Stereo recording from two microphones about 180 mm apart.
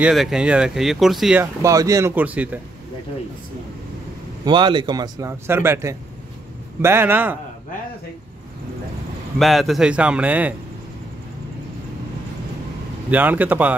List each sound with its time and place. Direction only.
0.0 s speech: centre (ahead or behind)
1.4 s speech: 15° right (ahead or behind)
4.5 s speech: 25° right (ahead or behind)
9.4 s speech: centre (ahead or behind)
13.1 s speech: 10° right (ahead or behind)